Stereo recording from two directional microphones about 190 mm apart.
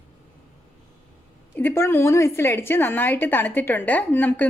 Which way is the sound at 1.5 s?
10° left (ahead or behind).